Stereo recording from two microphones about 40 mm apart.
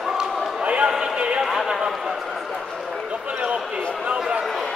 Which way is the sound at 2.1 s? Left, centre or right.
Centre.